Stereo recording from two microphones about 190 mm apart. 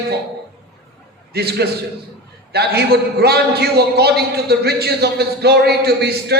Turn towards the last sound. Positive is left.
turn(degrees=-60)  # may be behind; listen again after turning